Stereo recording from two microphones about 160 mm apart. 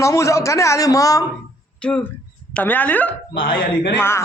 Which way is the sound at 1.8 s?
10° left (ahead or behind).